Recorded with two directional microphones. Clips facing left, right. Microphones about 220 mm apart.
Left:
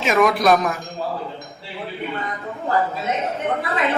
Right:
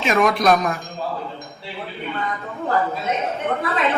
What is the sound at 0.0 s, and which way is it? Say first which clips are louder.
Speech: left 1 dB; centre (ahead or behind).